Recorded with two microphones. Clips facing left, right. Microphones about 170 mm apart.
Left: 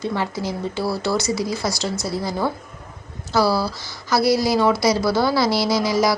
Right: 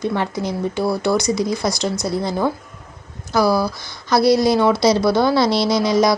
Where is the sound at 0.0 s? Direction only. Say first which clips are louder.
Right 3 dB; 15° right (ahead or behind).